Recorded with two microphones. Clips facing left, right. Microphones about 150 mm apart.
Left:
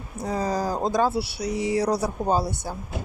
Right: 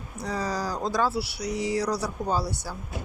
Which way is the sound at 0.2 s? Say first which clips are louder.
Left 4 dB; 50° left (ahead or behind).